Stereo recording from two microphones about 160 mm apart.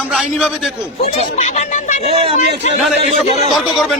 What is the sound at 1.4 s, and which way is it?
Speech, 45° left (ahead or behind).